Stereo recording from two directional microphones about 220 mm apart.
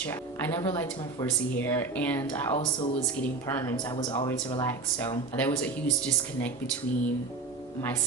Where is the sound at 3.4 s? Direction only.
15° left (ahead or behind).